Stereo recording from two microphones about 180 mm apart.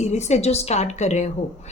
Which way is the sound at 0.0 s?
40° left (ahead or behind).